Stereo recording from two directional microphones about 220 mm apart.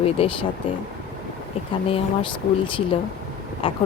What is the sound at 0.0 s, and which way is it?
Speech, 25° left (ahead or behind).